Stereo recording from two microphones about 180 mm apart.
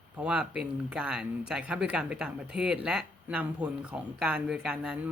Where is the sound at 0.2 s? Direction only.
5° right (ahead or behind).